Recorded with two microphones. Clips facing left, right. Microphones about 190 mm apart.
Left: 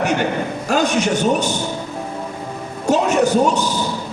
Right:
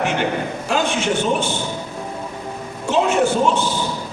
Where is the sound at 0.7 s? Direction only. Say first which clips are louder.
Left 3 dB; 40° left (ahead or behind).